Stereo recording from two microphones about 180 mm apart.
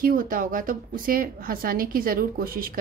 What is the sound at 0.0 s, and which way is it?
A woman's voice, 50° right (ahead or behind).